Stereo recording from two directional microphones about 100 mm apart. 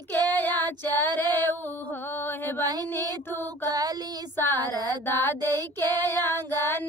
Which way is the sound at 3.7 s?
40° right (ahead or behind).